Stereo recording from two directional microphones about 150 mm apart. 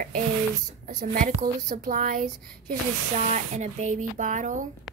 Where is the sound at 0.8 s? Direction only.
65° right (ahead or behind).